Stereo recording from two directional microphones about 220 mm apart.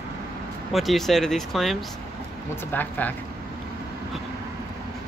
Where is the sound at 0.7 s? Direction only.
Centre (ahead or behind).